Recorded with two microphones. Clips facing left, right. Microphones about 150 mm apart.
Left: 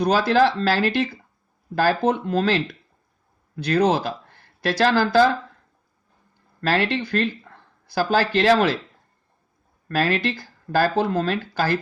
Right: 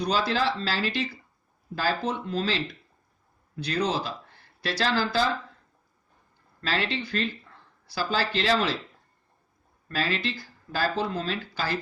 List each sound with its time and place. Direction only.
0.0 s speech: 50° left (ahead or behind)
6.6 s speech: 55° left (ahead or behind)
9.9 s speech: 50° left (ahead or behind)